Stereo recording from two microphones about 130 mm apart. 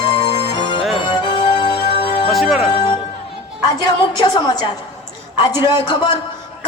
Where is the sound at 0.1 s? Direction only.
35° left (ahead or behind).